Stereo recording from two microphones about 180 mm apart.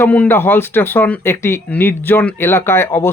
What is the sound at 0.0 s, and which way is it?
Speech, 10° left (ahead or behind).